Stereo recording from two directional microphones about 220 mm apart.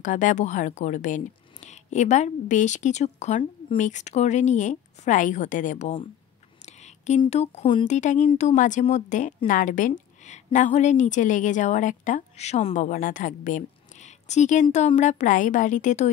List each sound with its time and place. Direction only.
0.0 s speech: 35° left (ahead or behind)